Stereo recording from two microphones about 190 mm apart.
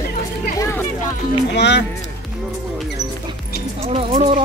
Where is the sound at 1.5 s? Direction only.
65° left (ahead or behind).